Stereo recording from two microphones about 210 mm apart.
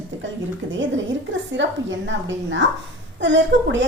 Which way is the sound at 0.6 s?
65° right (ahead or behind).